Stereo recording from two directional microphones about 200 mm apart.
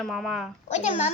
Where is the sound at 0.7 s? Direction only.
35° left (ahead or behind).